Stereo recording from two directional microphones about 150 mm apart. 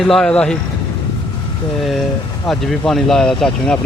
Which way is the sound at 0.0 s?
5° left (ahead or behind).